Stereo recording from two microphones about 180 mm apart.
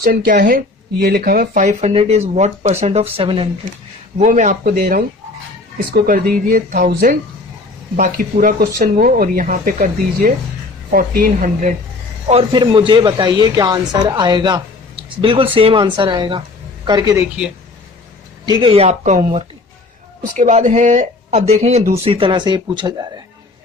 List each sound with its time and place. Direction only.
0.0 s speech: 50° right (ahead or behind); by 3.5 s 30° right (ahead or behind)
4.2 s speech: 45° right (ahead or behind)
12.3 s speech: 30° right (ahead or behind)
18.4 s speech: 25° right (ahead or behind)
18.9 s speech: 40° right (ahead or behind); by 23.2 s 20° right (ahead or behind)